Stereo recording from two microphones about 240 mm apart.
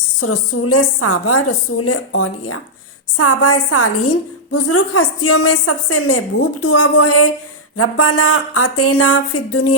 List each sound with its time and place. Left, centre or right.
0.2 s a woman's voice: left